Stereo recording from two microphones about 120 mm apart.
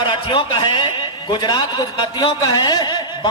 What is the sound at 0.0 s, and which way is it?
A man's voice, 45° left (ahead or behind).